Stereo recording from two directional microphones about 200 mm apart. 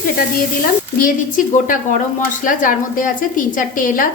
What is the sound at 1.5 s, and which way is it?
A woman's voice, 40° left (ahead or behind).